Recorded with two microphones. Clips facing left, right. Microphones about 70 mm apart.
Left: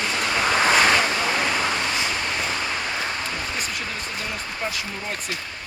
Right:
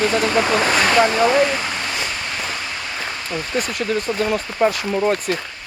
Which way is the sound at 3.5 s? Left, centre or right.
Right.